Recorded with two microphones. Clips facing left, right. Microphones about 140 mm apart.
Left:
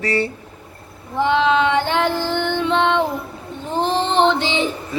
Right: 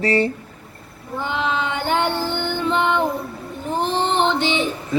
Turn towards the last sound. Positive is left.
turn(degrees=90)